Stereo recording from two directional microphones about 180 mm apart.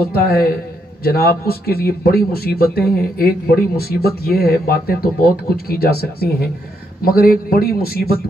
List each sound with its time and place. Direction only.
0.1 s speech: 55° left (ahead or behind)